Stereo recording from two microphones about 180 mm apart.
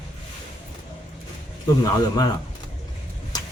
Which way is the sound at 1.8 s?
20° left (ahead or behind).